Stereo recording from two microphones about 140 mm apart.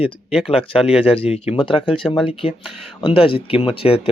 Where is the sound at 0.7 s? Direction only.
45° left (ahead or behind).